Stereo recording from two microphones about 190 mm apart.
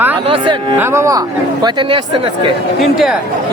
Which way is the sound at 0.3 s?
25° right (ahead or behind).